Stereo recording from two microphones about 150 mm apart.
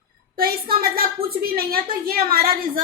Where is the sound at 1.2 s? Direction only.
40° right (ahead or behind).